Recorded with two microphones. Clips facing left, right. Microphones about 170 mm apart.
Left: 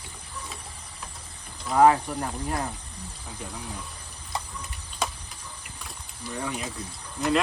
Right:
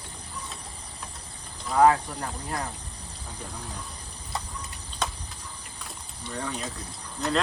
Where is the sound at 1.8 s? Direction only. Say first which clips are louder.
Left 1 dB; 25° left (ahead or behind).